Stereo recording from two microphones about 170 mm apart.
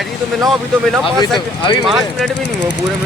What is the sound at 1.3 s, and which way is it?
Speech, 25° left (ahead or behind).